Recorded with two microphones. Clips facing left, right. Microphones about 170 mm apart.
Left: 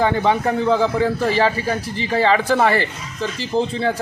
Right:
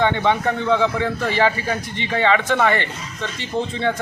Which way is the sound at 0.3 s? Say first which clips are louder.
Left 2 dB; 35° left (ahead or behind).